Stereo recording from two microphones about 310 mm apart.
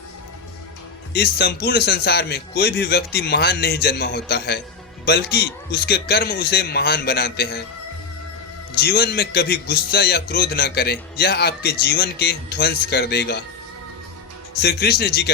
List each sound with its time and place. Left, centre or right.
1.1 s a man's voice: left
8.8 s a man's voice: left
14.6 s a man's voice: left